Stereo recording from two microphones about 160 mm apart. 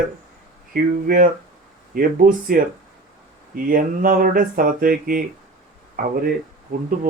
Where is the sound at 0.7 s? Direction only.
60° right (ahead or behind).